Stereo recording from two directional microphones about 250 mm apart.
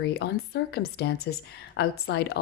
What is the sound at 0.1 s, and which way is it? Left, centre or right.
A woman's voice, left.